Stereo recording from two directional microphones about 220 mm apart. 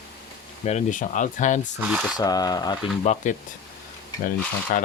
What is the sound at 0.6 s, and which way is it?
Speech, 30° left (ahead or behind).